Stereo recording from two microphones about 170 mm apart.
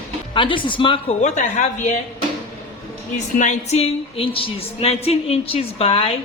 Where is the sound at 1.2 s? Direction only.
45° left (ahead or behind).